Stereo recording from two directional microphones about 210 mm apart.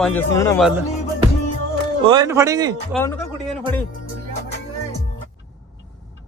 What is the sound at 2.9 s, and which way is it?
Music, 5° left (ahead or behind).